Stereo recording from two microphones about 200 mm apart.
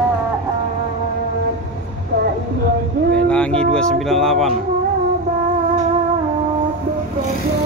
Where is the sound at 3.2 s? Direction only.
5° left (ahead or behind).